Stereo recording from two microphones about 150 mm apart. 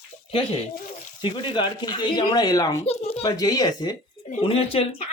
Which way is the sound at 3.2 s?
25° left (ahead or behind).